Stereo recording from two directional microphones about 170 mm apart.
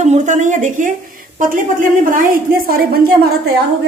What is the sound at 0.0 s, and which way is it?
A woman's voice, 45° right (ahead or behind).